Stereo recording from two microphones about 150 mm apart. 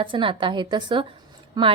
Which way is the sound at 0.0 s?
35° right (ahead or behind).